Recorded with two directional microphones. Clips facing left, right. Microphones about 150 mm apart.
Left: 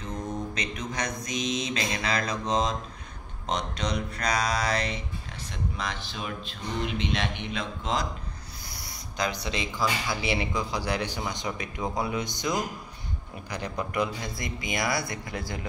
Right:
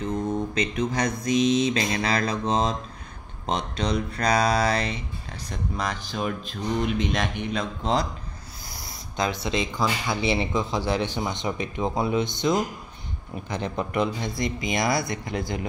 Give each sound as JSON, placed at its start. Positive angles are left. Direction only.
{"t": 0.6, "sound": "speech", "side_deg": -30}
{"t": 5.8, "sound": "speech", "side_deg": -45}
{"t": 8.8, "sound": "speech", "side_deg": -25}